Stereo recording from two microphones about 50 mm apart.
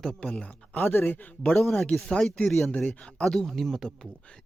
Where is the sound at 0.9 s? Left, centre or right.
Left.